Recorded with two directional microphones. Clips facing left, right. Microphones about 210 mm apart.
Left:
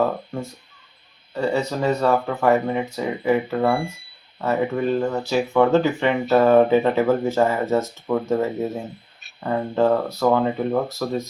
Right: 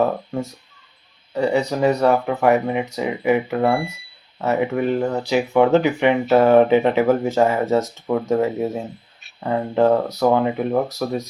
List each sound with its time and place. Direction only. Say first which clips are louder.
1.3 s speech: right 3 dB; 15° right (ahead or behind)